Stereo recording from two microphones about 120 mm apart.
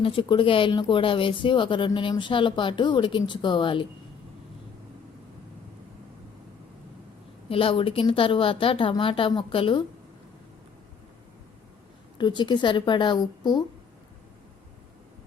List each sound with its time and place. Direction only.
0.0 s speech: 45° left (ahead or behind)
7.5 s speech: 50° left (ahead or behind)
12.1 s speech: 40° left (ahead or behind)